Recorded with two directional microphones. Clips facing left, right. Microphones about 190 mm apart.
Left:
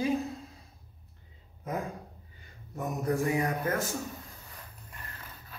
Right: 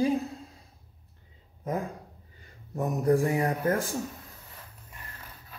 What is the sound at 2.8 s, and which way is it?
Speech, 35° right (ahead or behind).